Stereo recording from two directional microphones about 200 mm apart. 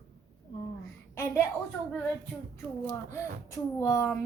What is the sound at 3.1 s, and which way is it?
Speech, 15° left (ahead or behind).